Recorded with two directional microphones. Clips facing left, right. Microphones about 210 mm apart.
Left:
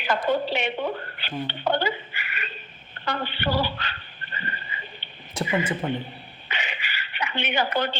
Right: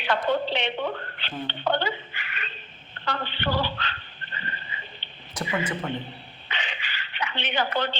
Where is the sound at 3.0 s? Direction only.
10° left (ahead or behind).